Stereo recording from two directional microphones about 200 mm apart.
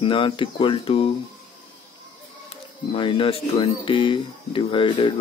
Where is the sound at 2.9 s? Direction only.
25° left (ahead or behind).